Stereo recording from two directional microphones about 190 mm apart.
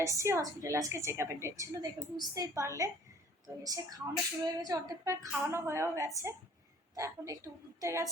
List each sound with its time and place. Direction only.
0.0 s a woman's voice: 15° right (ahead or behind)